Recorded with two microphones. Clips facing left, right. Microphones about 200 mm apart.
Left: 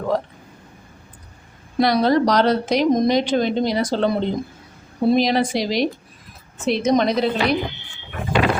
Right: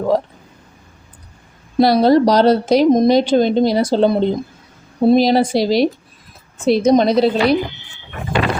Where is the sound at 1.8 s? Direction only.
30° right (ahead or behind).